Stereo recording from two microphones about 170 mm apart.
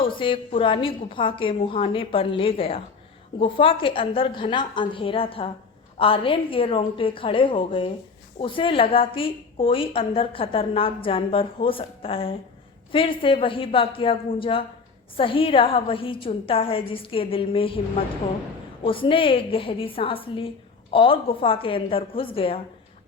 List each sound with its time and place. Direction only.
0.0 s a woman's voice: 30° left (ahead or behind)
18.8 s a woman's voice: 30° left (ahead or behind)